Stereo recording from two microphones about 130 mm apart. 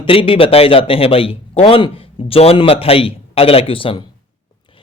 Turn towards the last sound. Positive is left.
turn(degrees=45)  # may be behind; listen again after turning